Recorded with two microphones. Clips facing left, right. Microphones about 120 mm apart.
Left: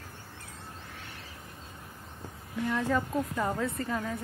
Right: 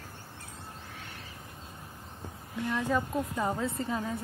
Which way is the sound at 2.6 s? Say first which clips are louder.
Left 1 dB; 10° right (ahead or behind).